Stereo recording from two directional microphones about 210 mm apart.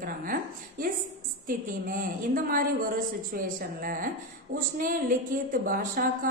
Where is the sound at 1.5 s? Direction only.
40° right (ahead or behind).